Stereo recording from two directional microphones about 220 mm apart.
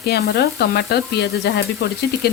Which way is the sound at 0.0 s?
45° left (ahead or behind).